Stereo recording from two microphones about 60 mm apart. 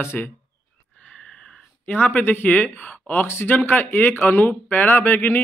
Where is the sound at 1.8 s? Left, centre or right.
Left.